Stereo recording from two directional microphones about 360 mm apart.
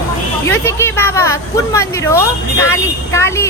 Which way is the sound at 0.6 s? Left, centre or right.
Centre.